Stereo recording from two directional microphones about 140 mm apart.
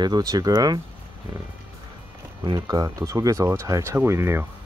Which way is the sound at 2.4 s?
30° right (ahead or behind).